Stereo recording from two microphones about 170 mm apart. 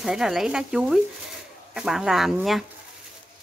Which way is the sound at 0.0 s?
5° right (ahead or behind).